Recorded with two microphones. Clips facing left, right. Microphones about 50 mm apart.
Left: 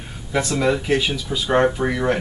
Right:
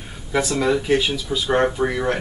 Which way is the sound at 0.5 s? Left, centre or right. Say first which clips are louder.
Even; centre.